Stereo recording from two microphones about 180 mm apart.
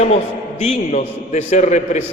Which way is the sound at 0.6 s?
40° left (ahead or behind).